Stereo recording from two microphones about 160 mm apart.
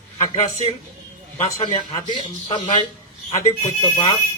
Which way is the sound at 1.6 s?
25° left (ahead or behind).